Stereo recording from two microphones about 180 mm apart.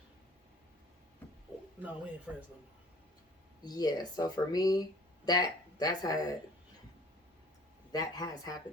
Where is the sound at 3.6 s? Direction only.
20° left (ahead or behind).